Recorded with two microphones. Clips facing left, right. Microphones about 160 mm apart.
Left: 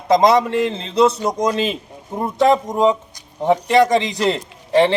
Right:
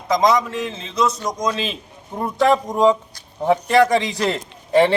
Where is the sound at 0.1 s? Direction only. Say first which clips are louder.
Left 4 dB; 60° left (ahead or behind).